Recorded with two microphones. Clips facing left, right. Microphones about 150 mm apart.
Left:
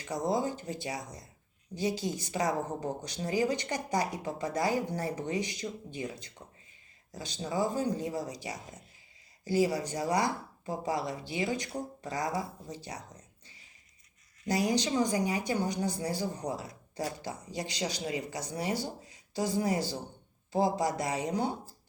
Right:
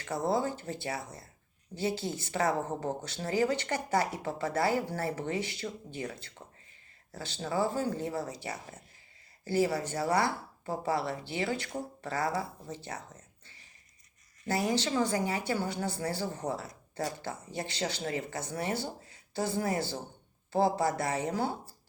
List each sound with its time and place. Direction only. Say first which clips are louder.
0.0 s speech: even; 15° left (ahead or behind)